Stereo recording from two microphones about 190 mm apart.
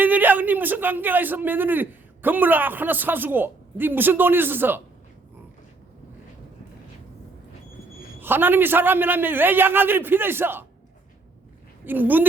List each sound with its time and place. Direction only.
0.0 s a man's voice: 10° right (ahead or behind)
8.2 s a man's voice: 10° right (ahead or behind)
11.9 s a man's voice: 10° right (ahead or behind)